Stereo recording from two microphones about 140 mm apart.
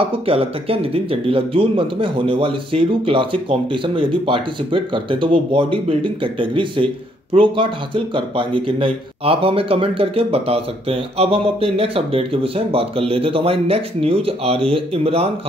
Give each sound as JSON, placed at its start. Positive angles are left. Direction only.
{"t": 0.0, "sound": "speech", "side_deg": -40}